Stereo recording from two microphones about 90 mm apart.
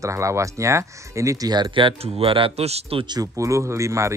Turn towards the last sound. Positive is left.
turn(degrees=-35)  # may be behind; listen again after turning